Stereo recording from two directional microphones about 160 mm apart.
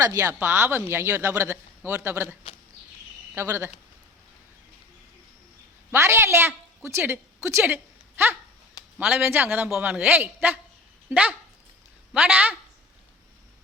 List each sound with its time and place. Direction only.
0.0 s speech: 20° right (ahead or behind)
3.3 s speech: 15° right (ahead or behind)
5.9 s a woman's voice: 15° right (ahead or behind)